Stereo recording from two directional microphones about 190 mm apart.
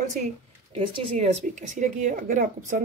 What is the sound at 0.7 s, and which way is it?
A woman's voice, 35° right (ahead or behind).